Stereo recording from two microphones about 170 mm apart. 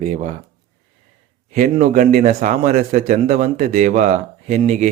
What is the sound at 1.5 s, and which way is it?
A man's voice, 50° right (ahead or behind).